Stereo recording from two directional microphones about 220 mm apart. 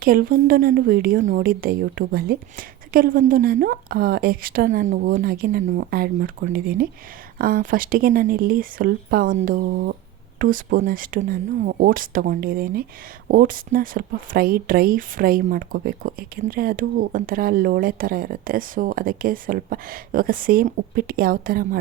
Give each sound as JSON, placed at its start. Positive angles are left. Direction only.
{"t": 0.0, "sound": "speech", "side_deg": -40}